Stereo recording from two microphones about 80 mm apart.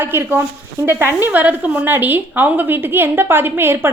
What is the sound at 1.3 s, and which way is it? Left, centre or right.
A woman's voice, right.